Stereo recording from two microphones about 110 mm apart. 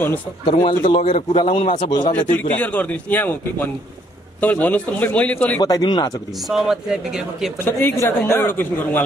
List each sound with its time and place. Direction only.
0.7 s a man's voice: 50° left (ahead or behind)
1.9 s a man's voice: 40° left (ahead or behind)
2.3 s a man's voice: 15° left (ahead or behind)
5.6 s speech: 40° left (ahead or behind)
6.5 s speech: 5° right (ahead or behind)
7.6 s a woman's voice: 20° left (ahead or behind)